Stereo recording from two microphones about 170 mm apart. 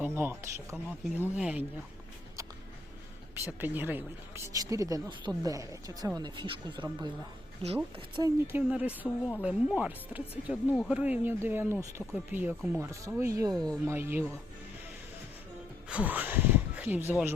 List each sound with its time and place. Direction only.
0.0 s speech: 15° right (ahead or behind)
3.6 s speech: 10° right (ahead or behind); by 8.3 s 30° right (ahead or behind)
8.5 s speech: 10° right (ahead or behind)
9.0 s a woman's voice: 10° left (ahead or behind)
9.4 s speech: 5° right (ahead or behind)
15.9 s speech: 10° right (ahead or behind)